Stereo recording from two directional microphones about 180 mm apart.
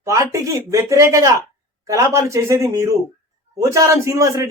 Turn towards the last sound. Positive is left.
turn(degrees=-15)  # may be behind; listen again after turning